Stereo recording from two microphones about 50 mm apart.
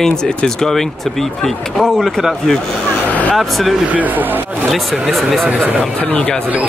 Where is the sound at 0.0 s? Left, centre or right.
Centre.